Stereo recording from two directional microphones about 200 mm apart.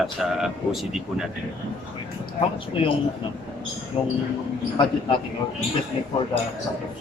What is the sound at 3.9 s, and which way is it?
Speech, 25° left (ahead or behind).